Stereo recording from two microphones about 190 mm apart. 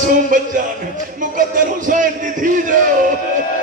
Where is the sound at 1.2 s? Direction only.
45° right (ahead or behind).